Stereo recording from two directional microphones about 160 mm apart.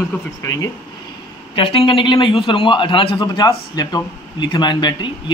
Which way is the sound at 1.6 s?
35° left (ahead or behind).